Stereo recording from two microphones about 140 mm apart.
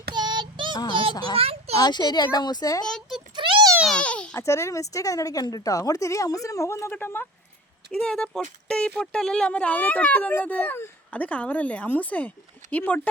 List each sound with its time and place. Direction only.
0.1 s child singing: 30° right (ahead or behind)
0.9 s a sound: 35° right (ahead or behind)
1.1 s a woman's voice: 30° left (ahead or behind)
1.4 s a sound: 45° right (ahead or behind)
1.7 s a woman's voice: 30° left (ahead or behind)
2.8 s speech: 5° left (ahead or behind)
3.3 s a sound: 35° right (ahead or behind)
3.8 s babbling: 10° left (ahead or behind)
4.4 s a woman's voice: 20° left (ahead or behind)